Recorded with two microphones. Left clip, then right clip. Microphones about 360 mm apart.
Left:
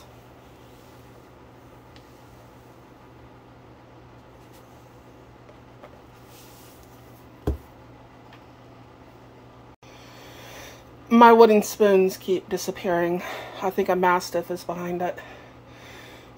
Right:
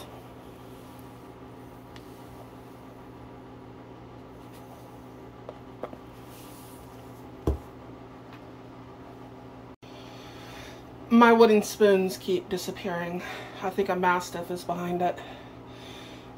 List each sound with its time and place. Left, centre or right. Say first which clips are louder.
10.5 s speech: left 1 dB; centre